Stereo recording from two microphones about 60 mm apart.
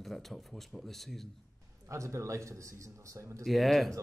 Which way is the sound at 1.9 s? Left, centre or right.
Right.